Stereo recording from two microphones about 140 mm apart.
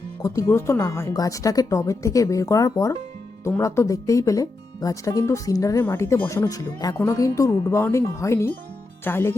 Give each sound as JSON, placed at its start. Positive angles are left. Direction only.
{"t": 0.2, "sound": "speech", "side_deg": 25}